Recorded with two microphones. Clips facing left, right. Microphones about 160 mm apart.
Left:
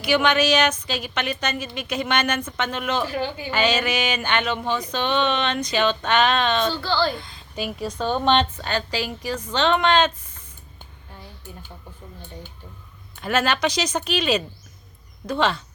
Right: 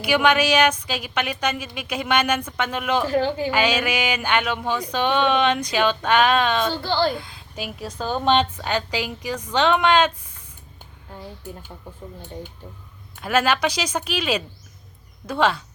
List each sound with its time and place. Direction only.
0.0 s speech: 10° right (ahead or behind)
3.1 s speech: 40° right (ahead or behind)
3.5 s speech: 10° right (ahead or behind)
6.8 s speech: 55° right (ahead or behind)
7.2 s speech: 5° right (ahead or behind)
13.1 s speech: 5° right (ahead or behind)